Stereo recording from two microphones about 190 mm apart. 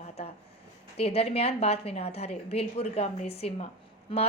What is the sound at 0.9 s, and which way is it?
A woman's voice, 30° left (ahead or behind).